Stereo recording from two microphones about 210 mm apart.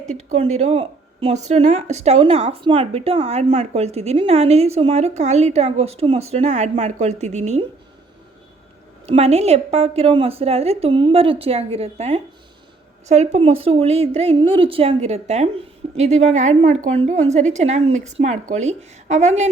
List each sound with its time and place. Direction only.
0.1 s speech: 35° right (ahead or behind)
9.0 s a woman's voice: 30° right (ahead or behind)